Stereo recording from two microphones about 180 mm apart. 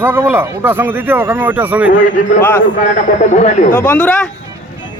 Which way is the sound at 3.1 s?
40° left (ahead or behind).